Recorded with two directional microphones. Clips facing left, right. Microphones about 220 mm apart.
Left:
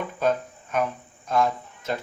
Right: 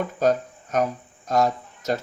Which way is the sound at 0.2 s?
40° right (ahead or behind).